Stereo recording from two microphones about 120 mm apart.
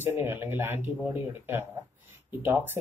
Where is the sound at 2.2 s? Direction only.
15° right (ahead or behind).